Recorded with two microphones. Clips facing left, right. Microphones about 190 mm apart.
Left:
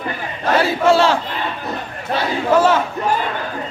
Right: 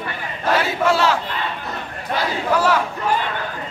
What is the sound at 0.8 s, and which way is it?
Battle cry, 30° left (ahead or behind).